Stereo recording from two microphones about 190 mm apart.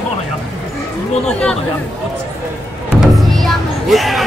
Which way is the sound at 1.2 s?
5° left (ahead or behind).